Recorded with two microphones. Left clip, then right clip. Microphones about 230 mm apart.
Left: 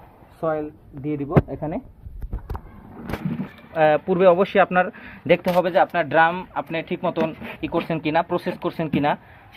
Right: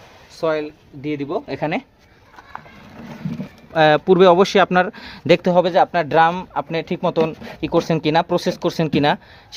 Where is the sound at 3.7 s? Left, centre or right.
Right.